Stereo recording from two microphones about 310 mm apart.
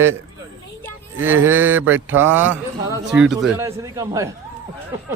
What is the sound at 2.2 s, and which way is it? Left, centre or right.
A man's voice, centre.